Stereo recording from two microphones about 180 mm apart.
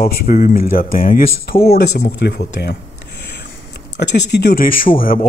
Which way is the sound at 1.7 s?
65° left (ahead or behind).